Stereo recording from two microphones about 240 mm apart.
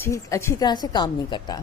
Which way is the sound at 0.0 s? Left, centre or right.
Centre.